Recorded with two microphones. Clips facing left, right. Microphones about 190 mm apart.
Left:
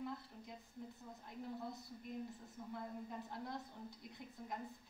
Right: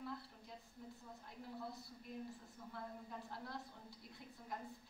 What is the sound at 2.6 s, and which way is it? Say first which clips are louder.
A woman's voice: left 5 dB; 20° left (ahead or behind).